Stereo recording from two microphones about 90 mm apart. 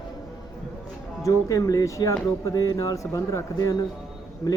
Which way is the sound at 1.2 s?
40° left (ahead or behind).